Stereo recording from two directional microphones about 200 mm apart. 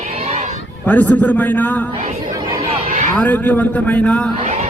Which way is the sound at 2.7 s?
40° right (ahead or behind).